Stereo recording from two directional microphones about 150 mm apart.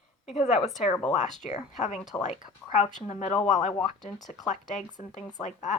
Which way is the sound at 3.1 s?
50° left (ahead or behind).